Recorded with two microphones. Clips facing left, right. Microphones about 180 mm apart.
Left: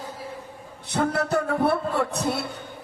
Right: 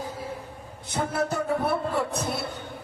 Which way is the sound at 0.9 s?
70° left (ahead or behind).